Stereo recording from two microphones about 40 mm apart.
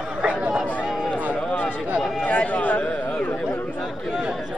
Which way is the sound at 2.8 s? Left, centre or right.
Left.